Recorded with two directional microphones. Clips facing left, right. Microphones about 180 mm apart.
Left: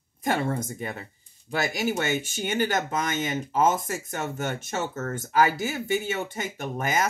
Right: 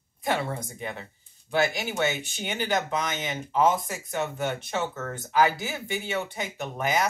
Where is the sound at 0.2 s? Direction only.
45° left (ahead or behind).